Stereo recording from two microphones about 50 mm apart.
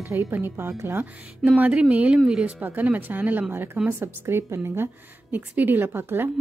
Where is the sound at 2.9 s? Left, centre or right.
Right.